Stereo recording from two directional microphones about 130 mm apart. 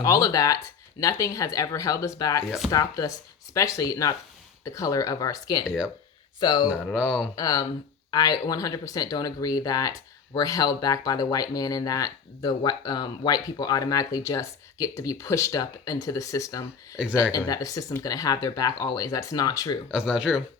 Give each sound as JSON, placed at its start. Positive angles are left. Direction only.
{"t": 0.0, "sound": "speech", "side_deg": 25}
{"t": 5.6, "sound": "speech", "side_deg": -5}
{"t": 6.4, "sound": "speech", "side_deg": 35}
{"t": 6.9, "sound": "speech", "side_deg": -5}
{"t": 7.3, "sound": "speech", "side_deg": 30}
{"t": 19.9, "sound": "speech", "side_deg": -5}